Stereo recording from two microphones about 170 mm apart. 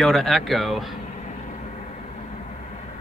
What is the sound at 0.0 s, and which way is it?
Speech, centre (ahead or behind).